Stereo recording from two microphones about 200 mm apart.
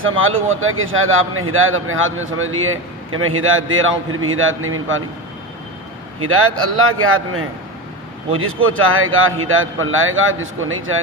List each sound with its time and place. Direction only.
0.0 s a man's voice: 85° right
6.1 s a man's voice: 90° right